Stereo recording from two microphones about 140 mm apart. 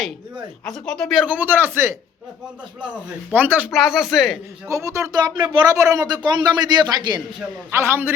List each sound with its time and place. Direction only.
0.6 s speech: 5° left (ahead or behind)
1.3 s speech: 15° right (ahead or behind)
3.3 s speech: 15° right (ahead or behind)
3.7 s speech: centre (ahead or behind)
4.7 s speech: 20° right (ahead or behind)
5.7 s a woman's voice: 25° right (ahead or behind)
7.7 s speech: 15° right (ahead or behind)